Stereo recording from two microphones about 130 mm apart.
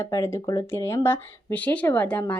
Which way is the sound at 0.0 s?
20° left (ahead or behind).